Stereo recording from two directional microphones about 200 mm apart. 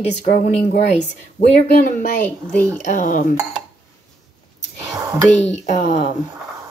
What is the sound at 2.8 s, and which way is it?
Speech, 40° left (ahead or behind).